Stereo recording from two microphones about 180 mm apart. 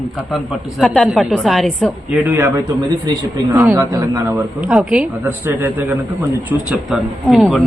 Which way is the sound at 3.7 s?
20° right (ahead or behind).